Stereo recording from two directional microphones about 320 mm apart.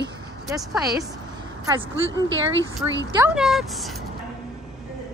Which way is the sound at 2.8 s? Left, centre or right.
Centre.